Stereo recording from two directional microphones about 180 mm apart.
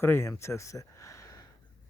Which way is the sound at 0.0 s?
15° left (ahead or behind).